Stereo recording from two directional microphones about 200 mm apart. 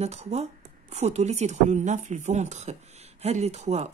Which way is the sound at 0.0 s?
35° right (ahead or behind).